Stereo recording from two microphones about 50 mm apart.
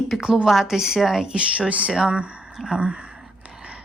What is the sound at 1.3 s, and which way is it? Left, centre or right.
A woman's voice, right.